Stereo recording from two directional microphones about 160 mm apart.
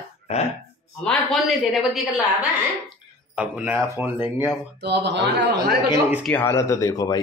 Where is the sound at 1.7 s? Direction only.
Centre (ahead or behind).